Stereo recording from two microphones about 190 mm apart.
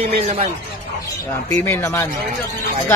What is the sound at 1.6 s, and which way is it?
Speech, 15° left (ahead or behind).